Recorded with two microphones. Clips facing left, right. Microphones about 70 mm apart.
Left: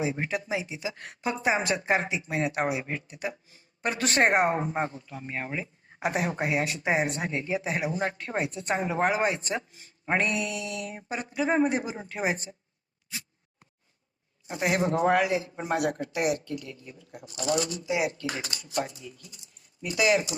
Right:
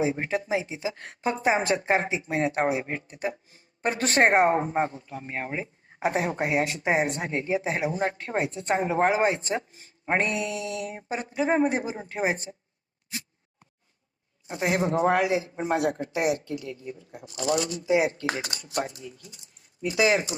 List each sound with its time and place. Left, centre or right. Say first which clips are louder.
0.0 s speech: right 3 dB; right
14.6 s speech: right 1 dB; right
19.8 s speech: right 1 dB; right